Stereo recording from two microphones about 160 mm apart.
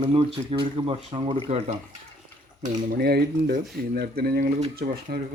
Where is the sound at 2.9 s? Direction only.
85° right.